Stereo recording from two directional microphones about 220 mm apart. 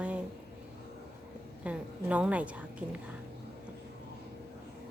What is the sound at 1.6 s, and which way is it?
A woman's voice, 5° right (ahead or behind).